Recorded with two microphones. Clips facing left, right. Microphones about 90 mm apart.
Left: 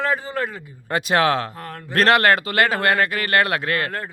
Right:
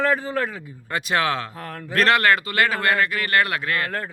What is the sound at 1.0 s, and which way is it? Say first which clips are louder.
Speech: left 4 dB; 60° left (ahead or behind).